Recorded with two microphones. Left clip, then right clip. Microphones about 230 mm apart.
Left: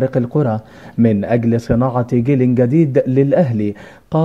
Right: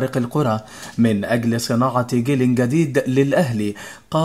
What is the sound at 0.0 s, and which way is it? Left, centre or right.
Speech, centre.